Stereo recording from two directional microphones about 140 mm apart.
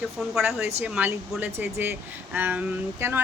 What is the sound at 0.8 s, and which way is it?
Speech, 10° right (ahead or behind).